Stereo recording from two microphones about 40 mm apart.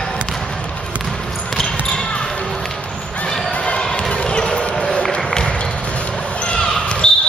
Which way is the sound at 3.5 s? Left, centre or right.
Left.